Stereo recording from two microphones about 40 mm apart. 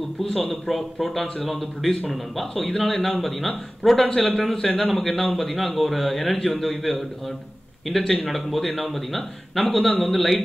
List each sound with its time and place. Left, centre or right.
0.2 s a man's voice: centre
4.2 s speech: left
4.9 s a man's voice: centre
8.0 s speech: centre
8.3 s a man's voice: centre